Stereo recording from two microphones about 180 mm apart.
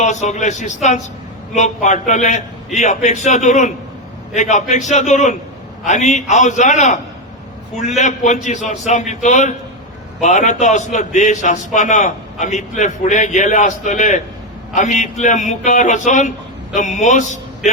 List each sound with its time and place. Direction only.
0.0 s a man's voice: 40° left (ahead or behind)